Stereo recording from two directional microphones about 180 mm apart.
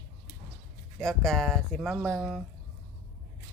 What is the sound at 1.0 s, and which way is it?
Speech, centre (ahead or behind).